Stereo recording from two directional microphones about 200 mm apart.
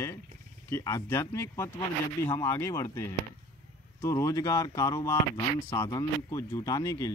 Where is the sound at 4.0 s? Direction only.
15° left (ahead or behind).